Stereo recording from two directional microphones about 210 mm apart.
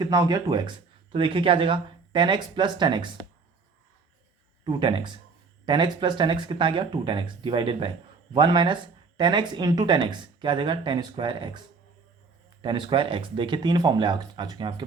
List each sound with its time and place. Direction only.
0.0 s speech: 20° right (ahead or behind)
4.6 s speech: 25° right (ahead or behind)
12.6 s speech: 25° right (ahead or behind)